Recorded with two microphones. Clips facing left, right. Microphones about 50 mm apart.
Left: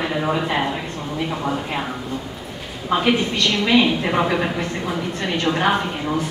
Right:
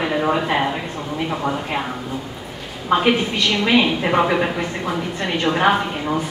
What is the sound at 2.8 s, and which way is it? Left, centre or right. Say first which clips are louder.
Speech: right 2 dB; centre.